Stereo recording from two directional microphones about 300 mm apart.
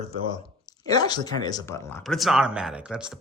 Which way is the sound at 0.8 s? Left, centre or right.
Centre.